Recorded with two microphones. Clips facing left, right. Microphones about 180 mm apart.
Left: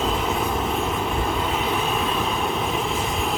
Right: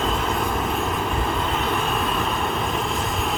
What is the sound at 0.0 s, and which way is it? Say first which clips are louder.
Vehicle: even; centre (ahead or behind).